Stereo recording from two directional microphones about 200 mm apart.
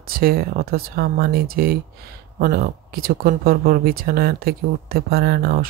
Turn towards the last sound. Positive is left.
turn(degrees=-50)  # may be behind; listen again after turning